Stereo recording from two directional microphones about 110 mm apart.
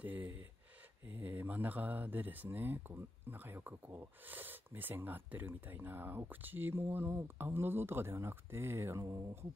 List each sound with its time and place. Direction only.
0.0 s speech: 15° right (ahead or behind)